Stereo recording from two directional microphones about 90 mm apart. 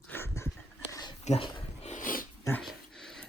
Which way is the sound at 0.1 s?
30° left (ahead or behind).